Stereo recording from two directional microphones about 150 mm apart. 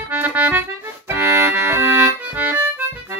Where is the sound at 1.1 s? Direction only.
15° right (ahead or behind).